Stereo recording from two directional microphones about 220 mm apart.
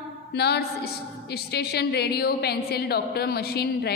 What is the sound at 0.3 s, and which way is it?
A woman's voice, 50° left (ahead or behind).